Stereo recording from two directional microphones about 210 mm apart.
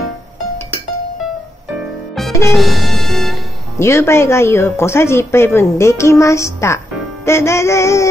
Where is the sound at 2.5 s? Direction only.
Centre (ahead or behind).